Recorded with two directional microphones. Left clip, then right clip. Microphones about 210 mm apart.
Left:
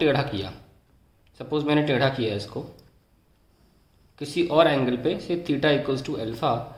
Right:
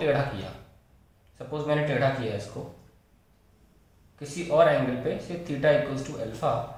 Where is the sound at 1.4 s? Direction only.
55° left (ahead or behind).